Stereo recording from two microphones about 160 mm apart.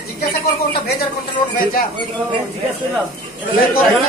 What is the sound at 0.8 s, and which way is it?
Speech, 75° left (ahead or behind).